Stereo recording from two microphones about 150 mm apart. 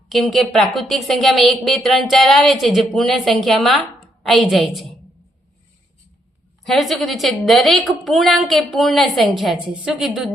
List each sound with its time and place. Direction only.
0.1 s speech: centre (ahead or behind)
6.7 s speech: centre (ahead or behind)